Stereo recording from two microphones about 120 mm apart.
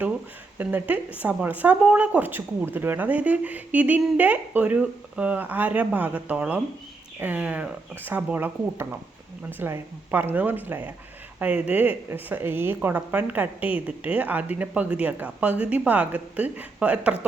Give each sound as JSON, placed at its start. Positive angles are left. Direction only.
{"t": 0.6, "sound": "speech", "side_deg": -15}